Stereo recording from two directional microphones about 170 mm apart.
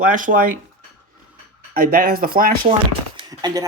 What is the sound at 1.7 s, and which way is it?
Speech, 55° right (ahead or behind).